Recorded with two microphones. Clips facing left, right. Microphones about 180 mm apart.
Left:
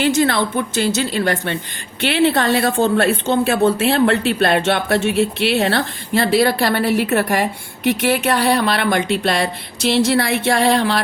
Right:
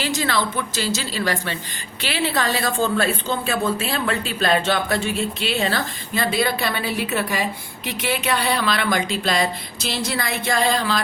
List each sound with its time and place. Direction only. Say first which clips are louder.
0.0 s speech: left 7 dB; 55° left (ahead or behind)
3.0 s speech: left 6 dB; 70° left (ahead or behind)